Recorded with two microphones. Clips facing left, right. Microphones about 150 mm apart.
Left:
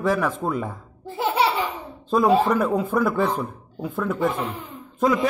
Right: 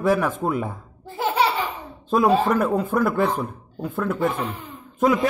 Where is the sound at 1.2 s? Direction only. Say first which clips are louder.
Even; 20° left (ahead or behind).